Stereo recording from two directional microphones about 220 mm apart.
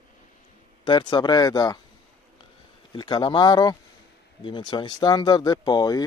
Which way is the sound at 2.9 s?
20° left (ahead or behind).